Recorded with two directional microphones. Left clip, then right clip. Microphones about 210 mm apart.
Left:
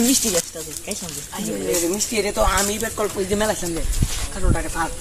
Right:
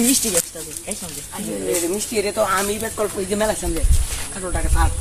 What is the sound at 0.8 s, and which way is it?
Speech, 35° left (ahead or behind).